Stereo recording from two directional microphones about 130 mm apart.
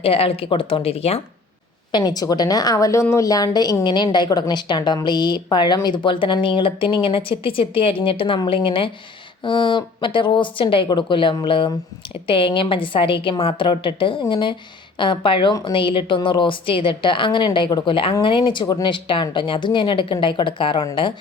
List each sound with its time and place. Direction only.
0.0 s speech: 45° left (ahead or behind)
1.9 s speech: 35° left (ahead or behind)